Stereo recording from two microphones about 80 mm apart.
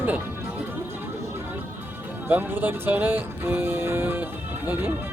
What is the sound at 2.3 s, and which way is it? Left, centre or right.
Speech, right.